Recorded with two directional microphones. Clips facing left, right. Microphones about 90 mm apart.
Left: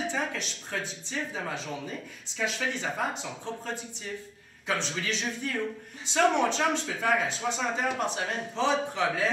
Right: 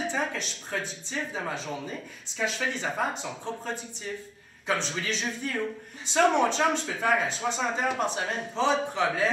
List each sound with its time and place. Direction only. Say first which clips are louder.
0.1 s speech: right 1 dB; 35° right (ahead or behind)